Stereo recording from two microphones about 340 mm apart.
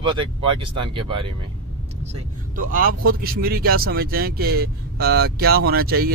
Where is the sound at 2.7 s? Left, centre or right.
Right.